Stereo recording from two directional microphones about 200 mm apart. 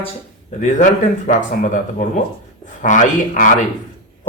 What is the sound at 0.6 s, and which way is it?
A man's voice, 40° left (ahead or behind).